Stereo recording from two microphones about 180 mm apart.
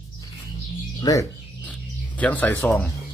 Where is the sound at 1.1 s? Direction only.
20° left (ahead or behind).